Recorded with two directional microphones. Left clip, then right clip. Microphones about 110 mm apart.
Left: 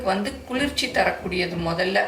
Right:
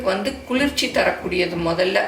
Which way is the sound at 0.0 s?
20° right (ahead or behind).